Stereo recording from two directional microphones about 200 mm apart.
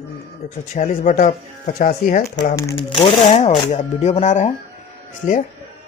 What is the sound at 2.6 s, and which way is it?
Speech, 20° left (ahead or behind).